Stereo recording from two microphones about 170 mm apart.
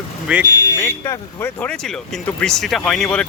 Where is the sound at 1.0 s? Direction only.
10° left (ahead or behind).